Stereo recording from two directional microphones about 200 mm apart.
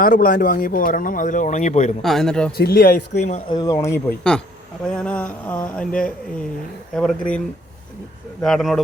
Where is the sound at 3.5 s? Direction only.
20° left (ahead or behind).